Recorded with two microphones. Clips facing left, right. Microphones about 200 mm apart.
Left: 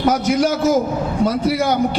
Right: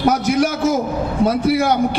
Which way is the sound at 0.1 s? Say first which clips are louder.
Even; 55° right (ahead or behind).